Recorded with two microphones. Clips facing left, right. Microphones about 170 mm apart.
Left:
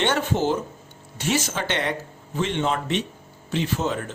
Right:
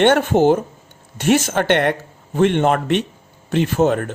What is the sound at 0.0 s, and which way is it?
Speech, 60° right (ahead or behind).